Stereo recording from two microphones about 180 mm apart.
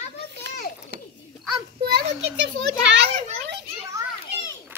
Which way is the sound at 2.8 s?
90° right.